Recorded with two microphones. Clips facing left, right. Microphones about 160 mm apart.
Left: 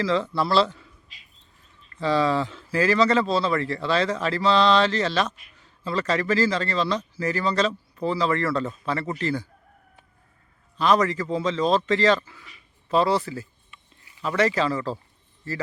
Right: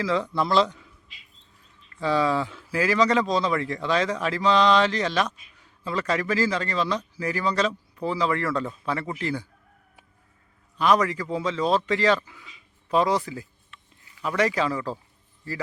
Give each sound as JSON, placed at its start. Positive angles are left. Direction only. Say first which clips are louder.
{"t": 0.0, "sound": "speech", "louder": "left 1 dB", "side_deg": -10}
{"t": 2.0, "sound": "speech", "louder": "left 1 dB", "side_deg": -10}
{"t": 10.8, "sound": "speech", "louder": "left 1 dB", "side_deg": -10}